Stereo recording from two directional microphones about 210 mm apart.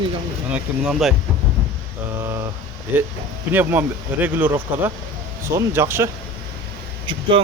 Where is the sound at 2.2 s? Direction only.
10° right (ahead or behind).